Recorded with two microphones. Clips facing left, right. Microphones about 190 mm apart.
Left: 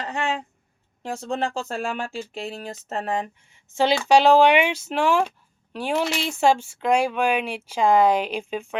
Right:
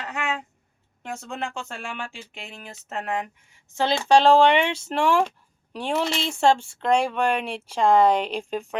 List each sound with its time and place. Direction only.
0.0 s a sound: 30° left (ahead or behind)
1.0 s speech: 35° left (ahead or behind)
4.1 s speech: 5° left (ahead or behind)